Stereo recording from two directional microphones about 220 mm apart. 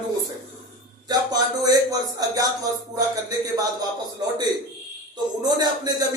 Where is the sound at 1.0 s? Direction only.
15° right (ahead or behind).